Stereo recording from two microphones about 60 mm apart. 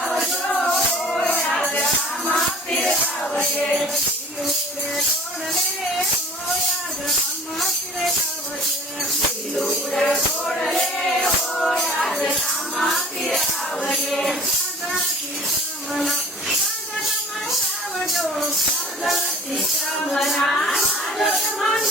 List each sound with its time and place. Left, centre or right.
0.0 s music: centre
2.3 s music: centre
9.6 s music: centre
16.0 s tambourine: centre
18.0 s music: centre